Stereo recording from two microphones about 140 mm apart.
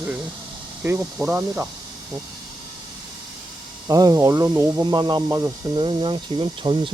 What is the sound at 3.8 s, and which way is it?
Speech, 25° right (ahead or behind).